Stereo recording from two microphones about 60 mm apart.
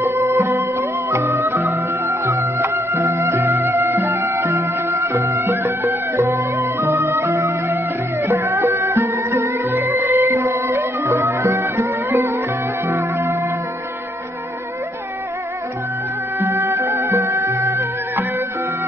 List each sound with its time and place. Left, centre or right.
0.0 s music: right
16.3 s music: right